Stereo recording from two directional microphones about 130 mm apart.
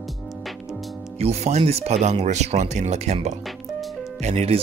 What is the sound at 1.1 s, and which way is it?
Speech, 55° right (ahead or behind).